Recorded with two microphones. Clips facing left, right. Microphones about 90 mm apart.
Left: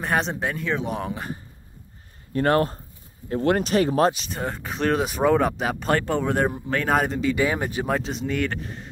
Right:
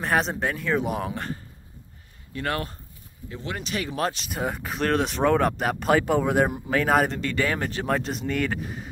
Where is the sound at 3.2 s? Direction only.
50° left (ahead or behind).